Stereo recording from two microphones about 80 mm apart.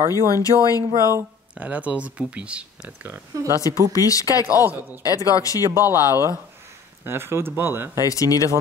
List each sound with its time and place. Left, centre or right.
0.3 s speech: left
1.6 s speech: centre
3.5 s speech: left
7.1 s speech: right
8.0 s speech: left